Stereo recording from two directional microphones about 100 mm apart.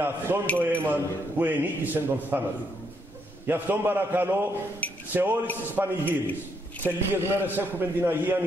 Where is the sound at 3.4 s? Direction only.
20° right (ahead or behind).